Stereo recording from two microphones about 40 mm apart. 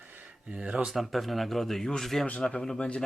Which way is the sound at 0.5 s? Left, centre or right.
Right.